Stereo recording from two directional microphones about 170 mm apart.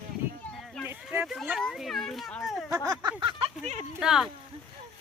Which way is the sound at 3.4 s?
35° right (ahead or behind).